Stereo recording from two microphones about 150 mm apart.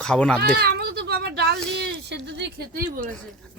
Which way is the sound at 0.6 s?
90° right.